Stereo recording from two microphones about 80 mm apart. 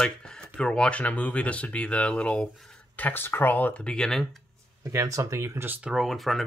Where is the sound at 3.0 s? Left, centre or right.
Left; by 4.3 s centre.